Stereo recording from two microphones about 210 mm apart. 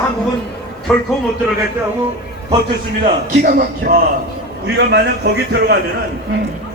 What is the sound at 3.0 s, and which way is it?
Speech, 35° right (ahead or behind).